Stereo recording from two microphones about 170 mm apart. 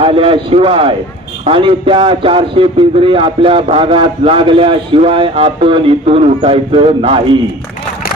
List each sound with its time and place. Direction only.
0.0 s a man's voice: 35° right (ahead or behind)